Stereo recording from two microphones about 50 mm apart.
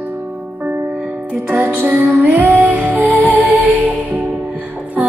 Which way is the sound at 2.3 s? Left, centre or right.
Right.